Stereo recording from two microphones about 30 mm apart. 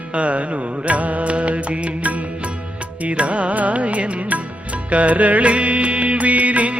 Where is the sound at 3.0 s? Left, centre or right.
Right.